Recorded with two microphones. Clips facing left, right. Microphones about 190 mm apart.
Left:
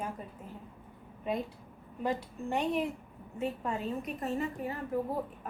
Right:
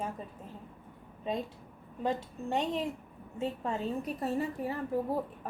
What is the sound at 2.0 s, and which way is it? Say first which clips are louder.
A woman's voice: even; 20° right (ahead or behind).